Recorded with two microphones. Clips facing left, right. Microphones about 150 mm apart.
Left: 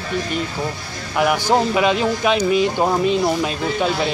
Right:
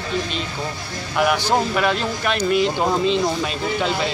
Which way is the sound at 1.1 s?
5° left (ahead or behind).